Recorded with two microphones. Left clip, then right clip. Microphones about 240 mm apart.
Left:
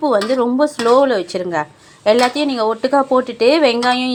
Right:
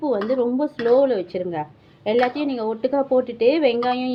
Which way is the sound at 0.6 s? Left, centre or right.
Left.